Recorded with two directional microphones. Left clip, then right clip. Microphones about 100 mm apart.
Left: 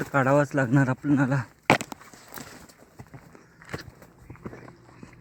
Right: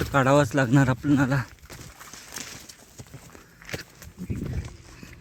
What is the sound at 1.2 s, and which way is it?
Speech, 15° right (ahead or behind).